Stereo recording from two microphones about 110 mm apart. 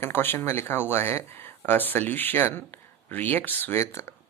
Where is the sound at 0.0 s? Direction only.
20° left (ahead or behind).